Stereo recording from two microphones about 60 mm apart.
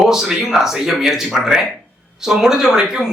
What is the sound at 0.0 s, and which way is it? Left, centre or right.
A man's voice, centre.